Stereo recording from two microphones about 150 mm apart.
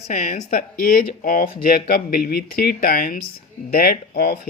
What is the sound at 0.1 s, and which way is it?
Speech, 60° left (ahead or behind).